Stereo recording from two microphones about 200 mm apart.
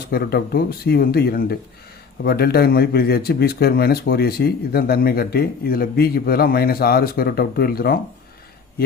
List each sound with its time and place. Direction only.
0.1 s speech: 50° left (ahead or behind)